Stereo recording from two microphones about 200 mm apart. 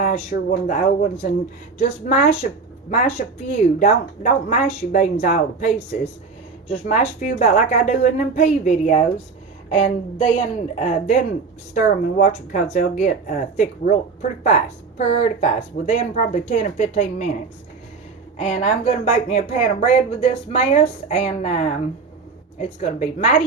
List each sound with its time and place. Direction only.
0.3 s speech: 40° left (ahead or behind)
18.3 s speech: 30° left (ahead or behind)